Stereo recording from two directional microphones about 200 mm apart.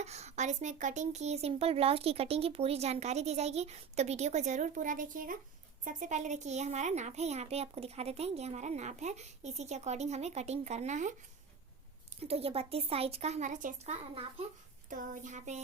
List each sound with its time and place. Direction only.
0.0 s speech: 35° right (ahead or behind)
12.2 s speech: 30° right (ahead or behind)